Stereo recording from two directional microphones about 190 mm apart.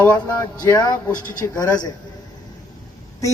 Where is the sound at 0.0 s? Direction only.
15° left (ahead or behind).